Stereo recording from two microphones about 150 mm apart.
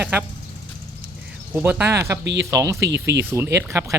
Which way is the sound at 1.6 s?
10° right (ahead or behind).